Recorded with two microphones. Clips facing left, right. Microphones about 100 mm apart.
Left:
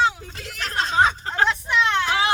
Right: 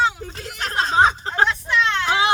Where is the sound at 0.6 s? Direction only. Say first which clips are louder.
Right 3 dB; 40° right (ahead or behind).